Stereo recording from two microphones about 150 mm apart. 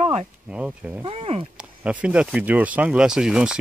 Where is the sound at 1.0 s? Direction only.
40° right (ahead or behind).